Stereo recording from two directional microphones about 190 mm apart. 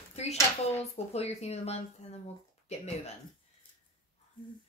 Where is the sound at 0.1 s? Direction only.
35° left (ahead or behind).